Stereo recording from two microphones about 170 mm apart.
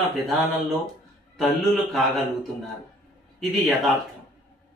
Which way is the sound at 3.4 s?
Centre (ahead or behind).